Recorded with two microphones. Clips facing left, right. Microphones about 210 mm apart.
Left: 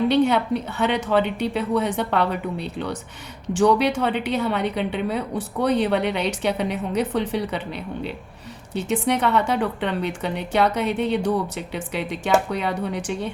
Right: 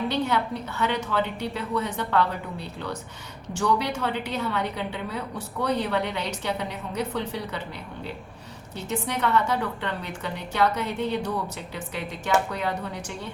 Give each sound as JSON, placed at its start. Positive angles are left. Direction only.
{"t": 0.1, "sound": "a woman's voice", "side_deg": 70}
{"t": 3.6, "sound": "a woman's voice", "side_deg": 75}
{"t": 8.7, "sound": "a woman's voice", "side_deg": 75}